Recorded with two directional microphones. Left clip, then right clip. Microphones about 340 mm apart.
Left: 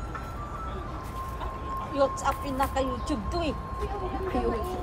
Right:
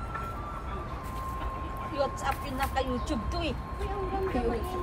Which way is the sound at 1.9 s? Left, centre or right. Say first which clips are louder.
Left 4 dB; left.